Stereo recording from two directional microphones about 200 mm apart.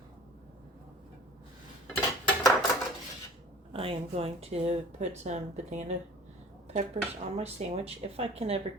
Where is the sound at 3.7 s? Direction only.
30° right (ahead or behind).